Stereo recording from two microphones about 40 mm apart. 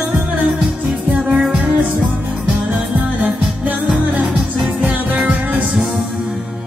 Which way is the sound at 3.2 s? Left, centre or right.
Right.